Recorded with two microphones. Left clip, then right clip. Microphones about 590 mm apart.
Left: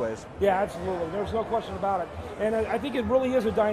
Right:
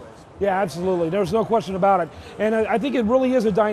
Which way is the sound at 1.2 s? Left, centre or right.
Right.